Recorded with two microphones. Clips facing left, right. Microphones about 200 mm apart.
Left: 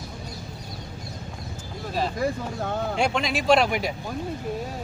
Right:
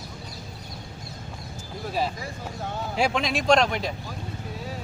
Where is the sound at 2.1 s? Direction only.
55° left (ahead or behind).